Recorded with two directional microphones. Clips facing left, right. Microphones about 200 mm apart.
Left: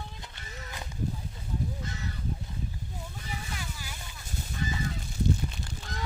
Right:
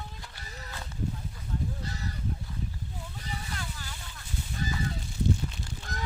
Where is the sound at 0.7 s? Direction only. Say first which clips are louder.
Even; 15° left (ahead or behind).